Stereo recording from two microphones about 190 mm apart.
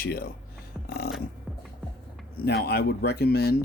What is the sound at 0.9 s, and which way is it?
Music, 55° left (ahead or behind).